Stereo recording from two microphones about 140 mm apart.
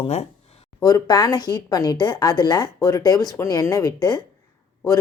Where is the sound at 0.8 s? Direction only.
25° left (ahead or behind).